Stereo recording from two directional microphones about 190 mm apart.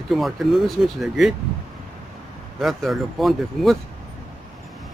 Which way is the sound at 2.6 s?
Centre (ahead or behind).